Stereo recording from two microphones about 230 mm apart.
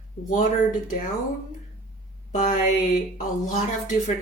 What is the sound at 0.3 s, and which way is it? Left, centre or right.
Speech, left.